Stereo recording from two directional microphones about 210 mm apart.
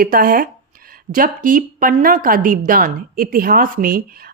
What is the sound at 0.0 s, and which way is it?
Speech, 45° right (ahead or behind).